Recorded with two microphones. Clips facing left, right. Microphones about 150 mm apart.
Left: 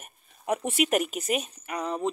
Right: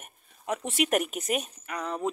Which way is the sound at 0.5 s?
15° left (ahead or behind).